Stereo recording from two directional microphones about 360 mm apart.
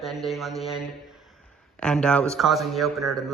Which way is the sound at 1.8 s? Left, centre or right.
Centre.